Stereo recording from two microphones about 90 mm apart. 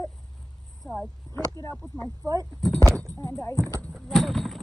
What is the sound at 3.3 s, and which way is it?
Speech, 30° left (ahead or behind).